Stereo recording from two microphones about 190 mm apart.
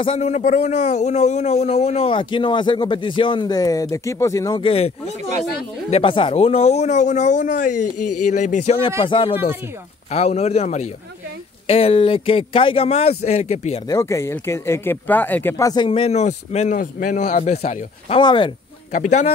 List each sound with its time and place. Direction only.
0.0 s a man's voice: 35° left (ahead or behind)
9.0 s a man's voice: 25° left (ahead or behind)
13.8 s a man's voice: 15° left (ahead or behind)
18.9 s speech: 40° left (ahead or behind)